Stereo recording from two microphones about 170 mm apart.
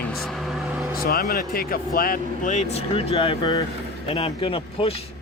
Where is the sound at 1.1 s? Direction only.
65° left (ahead or behind); by 3.6 s 25° left (ahead or behind).